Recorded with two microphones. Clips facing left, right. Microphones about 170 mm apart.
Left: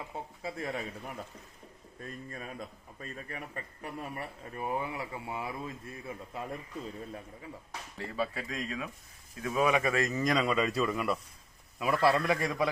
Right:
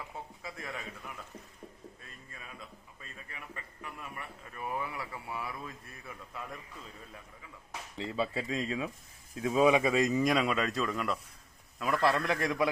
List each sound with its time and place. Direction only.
0.4 s a man's voice: 30° left (ahead or behind)
7.9 s a man's voice: 20° right (ahead or behind); by 12.6 s centre (ahead or behind)